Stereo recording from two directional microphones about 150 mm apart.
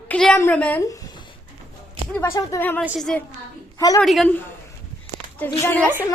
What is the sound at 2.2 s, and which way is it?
Speech, 20° left (ahead or behind).